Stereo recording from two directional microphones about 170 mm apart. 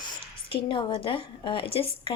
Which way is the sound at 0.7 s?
30° left (ahead or behind).